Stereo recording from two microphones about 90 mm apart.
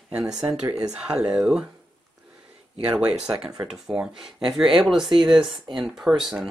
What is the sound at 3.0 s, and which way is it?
Speech, 10° right (ahead or behind).